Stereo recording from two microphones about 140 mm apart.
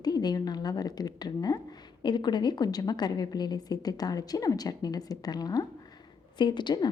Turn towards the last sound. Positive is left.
turn(degrees=35)  # may be behind; listen again after turning